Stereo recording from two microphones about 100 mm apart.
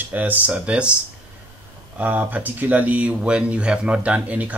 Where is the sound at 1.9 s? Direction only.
15° right (ahead or behind).